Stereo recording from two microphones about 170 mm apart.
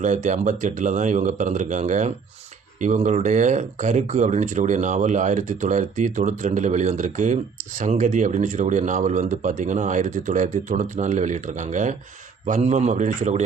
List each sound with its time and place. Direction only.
0.0 s speech: 45° right (ahead or behind)